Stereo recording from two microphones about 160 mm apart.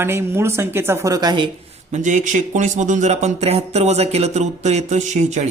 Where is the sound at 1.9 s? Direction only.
50° right (ahead or behind).